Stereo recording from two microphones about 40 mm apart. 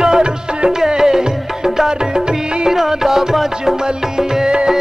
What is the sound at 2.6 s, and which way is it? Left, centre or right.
Music, centre.